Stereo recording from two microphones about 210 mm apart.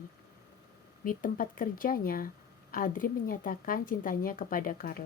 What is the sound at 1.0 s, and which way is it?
Speech, 40° left (ahead or behind).